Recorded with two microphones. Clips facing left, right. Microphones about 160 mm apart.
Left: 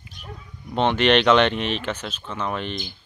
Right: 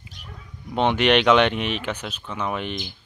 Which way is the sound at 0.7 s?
10° right (ahead or behind).